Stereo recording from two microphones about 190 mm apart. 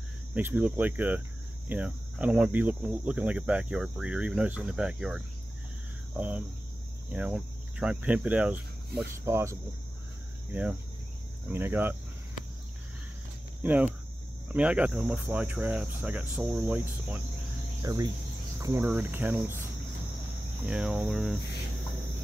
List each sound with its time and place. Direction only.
0.3 s cricket: 10° right (ahead or behind)
1.7 s speech: 5° right (ahead or behind)
6.1 s cricket: 10° right (ahead or behind)
7.1 s speech: 5° right (ahead or behind)
10.5 s cricket: 5° right (ahead or behind)
13.6 s speech: 10° right (ahead or behind)
14.5 s cricket: 5° right (ahead or behind)
17.8 s speech: 20° right (ahead or behind)
18.6 s cricket: 10° right (ahead or behind)
20.6 s speech: 5° right (ahead or behind)